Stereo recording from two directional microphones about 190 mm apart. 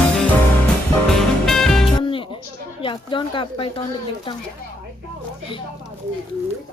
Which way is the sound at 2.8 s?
25° left (ahead or behind).